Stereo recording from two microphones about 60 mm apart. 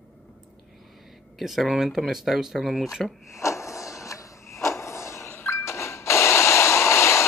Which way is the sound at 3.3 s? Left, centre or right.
Left.